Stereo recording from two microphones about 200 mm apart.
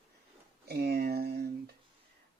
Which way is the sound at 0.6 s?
50° right (ahead or behind).